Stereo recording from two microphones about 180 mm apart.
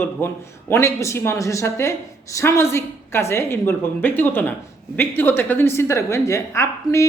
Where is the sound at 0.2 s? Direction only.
15° left (ahead or behind).